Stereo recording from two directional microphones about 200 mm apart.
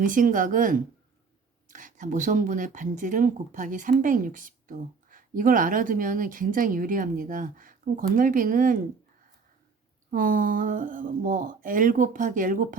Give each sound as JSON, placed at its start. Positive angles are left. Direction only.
{"t": 0.0, "sound": "speech", "side_deg": -40}
{"t": 10.1, "sound": "speech", "side_deg": -45}